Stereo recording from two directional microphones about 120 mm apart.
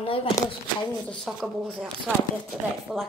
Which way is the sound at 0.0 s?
50° left (ahead or behind).